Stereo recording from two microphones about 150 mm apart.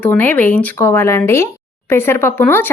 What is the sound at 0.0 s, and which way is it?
A woman's voice, 10° left (ahead or behind).